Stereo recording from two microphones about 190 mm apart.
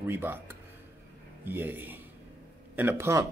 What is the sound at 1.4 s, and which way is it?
A man's voice, 10° right (ahead or behind).